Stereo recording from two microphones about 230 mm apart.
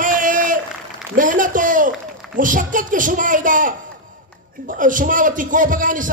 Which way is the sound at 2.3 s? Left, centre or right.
Right.